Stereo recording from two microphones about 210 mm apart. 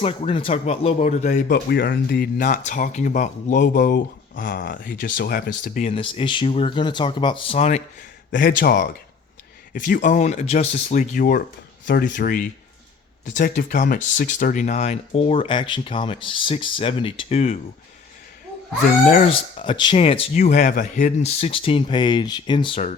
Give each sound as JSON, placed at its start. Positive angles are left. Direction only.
{"t": 0.0, "sound": "speech", "side_deg": 25}
{"t": 5.9, "sound": "speech", "side_deg": 25}
{"t": 8.3, "sound": "a man's voice", "side_deg": 40}
{"t": 9.7, "sound": "speech", "side_deg": 40}
{"t": 19.0, "sound": "speech", "side_deg": 35}
{"t": 19.3, "sound": "speech", "side_deg": 25}